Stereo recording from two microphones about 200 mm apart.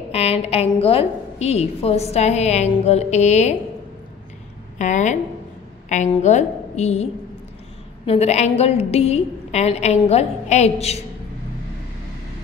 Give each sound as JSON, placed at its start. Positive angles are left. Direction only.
{"t": 0.1, "sound": "a woman's voice", "side_deg": 30}
{"t": 4.7, "sound": "a woman's voice", "side_deg": 35}
{"t": 8.1, "sound": "a woman's voice", "side_deg": 30}